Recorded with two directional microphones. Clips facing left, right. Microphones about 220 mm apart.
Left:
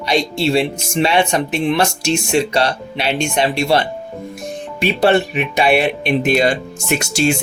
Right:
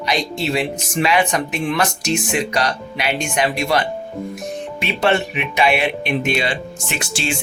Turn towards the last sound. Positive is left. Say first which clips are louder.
# left 8 dB
turn(degrees=40)  # may be behind; listen again after turning